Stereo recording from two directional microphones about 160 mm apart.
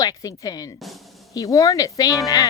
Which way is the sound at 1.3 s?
20° left (ahead or behind).